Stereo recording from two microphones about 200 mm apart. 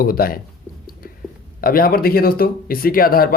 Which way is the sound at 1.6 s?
45° left (ahead or behind).